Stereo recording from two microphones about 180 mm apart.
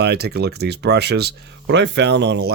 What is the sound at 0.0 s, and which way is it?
Speech, 65° right (ahead or behind).